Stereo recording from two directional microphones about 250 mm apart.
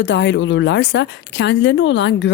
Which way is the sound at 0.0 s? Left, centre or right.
Left.